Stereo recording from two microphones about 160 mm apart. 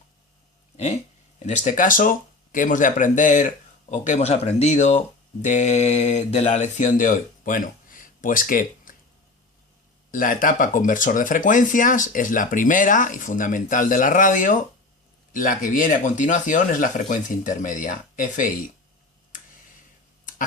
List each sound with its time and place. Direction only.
1.4 s speech: 50° left (ahead or behind)
10.1 s speech: 60° left (ahead or behind)